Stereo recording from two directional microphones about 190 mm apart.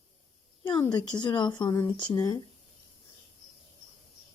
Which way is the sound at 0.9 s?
25° left (ahead or behind).